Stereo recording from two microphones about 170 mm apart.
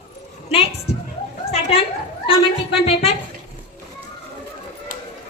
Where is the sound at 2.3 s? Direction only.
35° left (ahead or behind).